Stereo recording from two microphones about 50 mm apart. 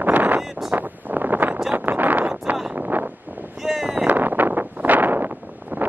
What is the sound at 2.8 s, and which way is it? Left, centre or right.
Wind noise, right.